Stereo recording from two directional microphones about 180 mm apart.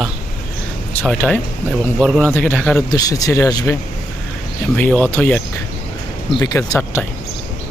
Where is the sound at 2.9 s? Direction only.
20° left (ahead or behind).